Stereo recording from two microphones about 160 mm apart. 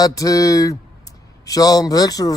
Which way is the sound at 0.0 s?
20° left (ahead or behind).